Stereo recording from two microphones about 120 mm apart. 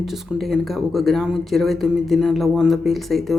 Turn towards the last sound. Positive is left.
turn(degrees=0)  # may be behind; listen again after turning